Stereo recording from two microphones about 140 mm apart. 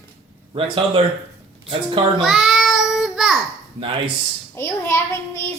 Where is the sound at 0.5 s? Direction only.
40° right (ahead or behind).